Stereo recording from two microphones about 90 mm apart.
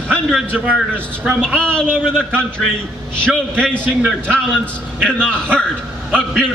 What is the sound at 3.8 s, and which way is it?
Speech, 20° right (ahead or behind).